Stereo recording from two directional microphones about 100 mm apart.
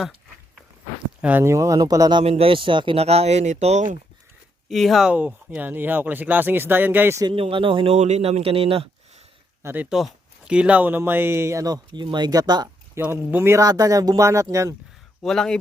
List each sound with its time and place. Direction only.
1.2 s speech: 15° right (ahead or behind)
1.5 s speech: 35° right (ahead or behind)
2.2 s speech: 65° right (ahead or behind); by 3.8 s 90° right
4.7 s speech: centre (ahead or behind)
5.0 s speech: 15° right (ahead or behind)
7.3 s speech: 65° right (ahead or behind)
9.9 s speech: 5° right (ahead or behind); by 12.6 s 40° right (ahead or behind)
13.0 s speech: 20° right (ahead or behind)
13.6 s speech: 40° right (ahead or behind)
15.2 s speech: 5° left (ahead or behind)